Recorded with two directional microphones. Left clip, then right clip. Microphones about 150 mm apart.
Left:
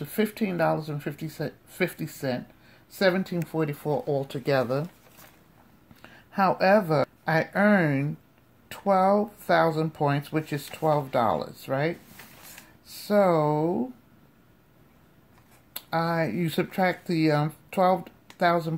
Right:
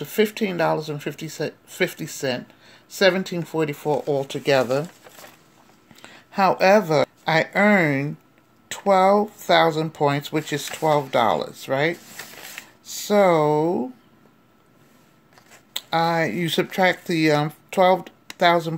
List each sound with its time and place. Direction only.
0.0 s speech: 15° right (ahead or behind)
6.0 s speech: 20° right (ahead or behind)
12.9 s speech: 25° right (ahead or behind)
15.7 s speech: 20° right (ahead or behind)